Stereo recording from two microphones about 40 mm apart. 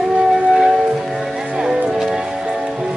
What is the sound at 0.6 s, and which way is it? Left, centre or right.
Music, centre.